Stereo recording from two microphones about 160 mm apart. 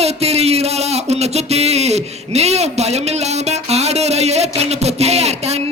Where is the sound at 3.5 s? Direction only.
45° right (ahead or behind).